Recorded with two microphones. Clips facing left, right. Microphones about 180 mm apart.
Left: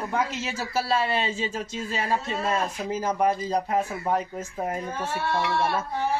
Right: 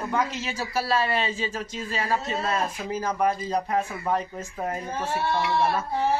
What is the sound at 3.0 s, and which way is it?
Speech, 15° left (ahead or behind).